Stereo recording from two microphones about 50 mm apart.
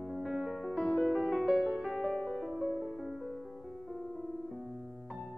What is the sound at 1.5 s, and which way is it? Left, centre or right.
Music, centre.